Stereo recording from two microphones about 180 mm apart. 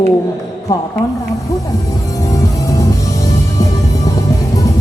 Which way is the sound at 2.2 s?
20° left (ahead or behind).